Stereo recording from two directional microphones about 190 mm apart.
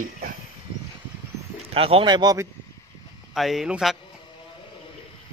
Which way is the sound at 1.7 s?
30° right (ahead or behind).